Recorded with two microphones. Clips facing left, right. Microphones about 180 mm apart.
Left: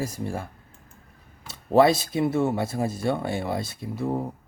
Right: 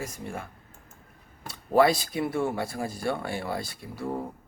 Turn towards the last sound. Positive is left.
turn(degrees=20)  # may be behind; listen again after turning